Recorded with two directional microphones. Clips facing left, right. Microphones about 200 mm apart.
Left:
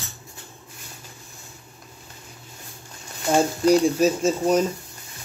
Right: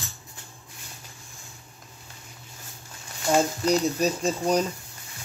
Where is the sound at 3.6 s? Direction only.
10° left (ahead or behind).